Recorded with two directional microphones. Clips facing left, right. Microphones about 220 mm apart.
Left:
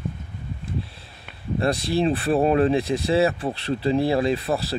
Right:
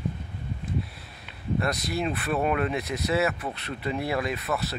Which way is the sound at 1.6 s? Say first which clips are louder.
Left 8 dB; 30° left (ahead or behind).